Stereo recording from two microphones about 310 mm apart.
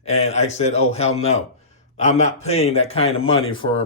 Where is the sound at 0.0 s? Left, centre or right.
Left.